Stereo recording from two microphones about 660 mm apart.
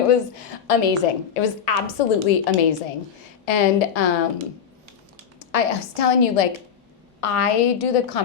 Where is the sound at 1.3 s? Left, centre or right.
Left.